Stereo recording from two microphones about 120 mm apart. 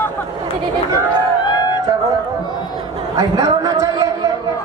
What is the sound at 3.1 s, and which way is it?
Speech, 30° right (ahead or behind).